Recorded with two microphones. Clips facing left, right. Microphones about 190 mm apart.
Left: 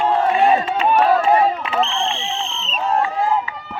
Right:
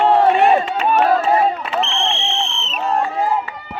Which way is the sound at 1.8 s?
70° right (ahead or behind).